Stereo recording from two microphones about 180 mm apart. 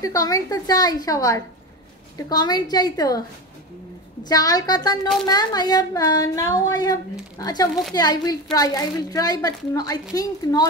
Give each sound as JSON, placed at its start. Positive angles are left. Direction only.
{"t": 0.0, "sound": "speech", "side_deg": 20}
{"t": 4.3, "sound": "speech", "side_deg": 20}